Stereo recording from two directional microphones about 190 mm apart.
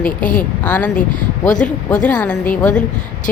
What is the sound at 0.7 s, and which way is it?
Speech, 5° left (ahead or behind).